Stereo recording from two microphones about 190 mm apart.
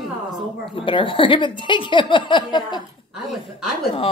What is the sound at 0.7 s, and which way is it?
A woman's voice, 25° left (ahead or behind).